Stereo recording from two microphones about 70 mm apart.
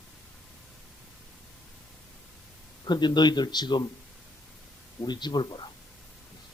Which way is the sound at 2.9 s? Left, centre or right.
Left.